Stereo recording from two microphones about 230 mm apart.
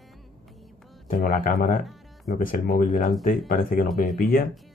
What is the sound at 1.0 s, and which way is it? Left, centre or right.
Speech, left.